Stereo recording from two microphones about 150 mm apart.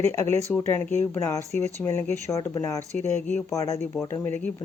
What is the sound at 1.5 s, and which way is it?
Speech, 50° right (ahead or behind).